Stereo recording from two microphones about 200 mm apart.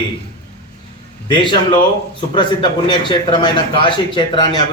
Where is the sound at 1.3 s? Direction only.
25° left (ahead or behind).